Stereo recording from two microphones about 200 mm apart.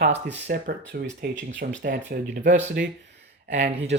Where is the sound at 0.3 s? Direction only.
55° right (ahead or behind).